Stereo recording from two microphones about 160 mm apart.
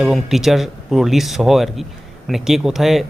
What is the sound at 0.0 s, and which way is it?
Speech, centre (ahead or behind).